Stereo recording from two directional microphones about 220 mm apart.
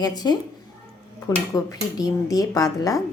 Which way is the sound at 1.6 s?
15° left (ahead or behind).